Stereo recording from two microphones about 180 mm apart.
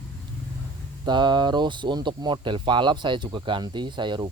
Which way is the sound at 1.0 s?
25° right (ahead or behind).